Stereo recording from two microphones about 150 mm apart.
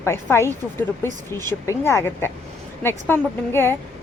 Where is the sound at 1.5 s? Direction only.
15° left (ahead or behind).